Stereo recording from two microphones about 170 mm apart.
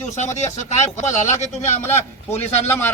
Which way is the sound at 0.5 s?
45° left (ahead or behind).